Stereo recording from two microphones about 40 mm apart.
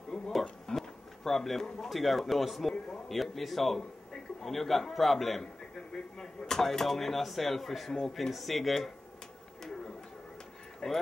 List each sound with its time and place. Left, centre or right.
0.3 s a man's voice: centre
10.8 s speech: centre